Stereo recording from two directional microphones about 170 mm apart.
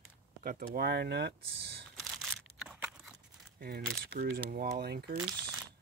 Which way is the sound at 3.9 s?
65° right (ahead or behind).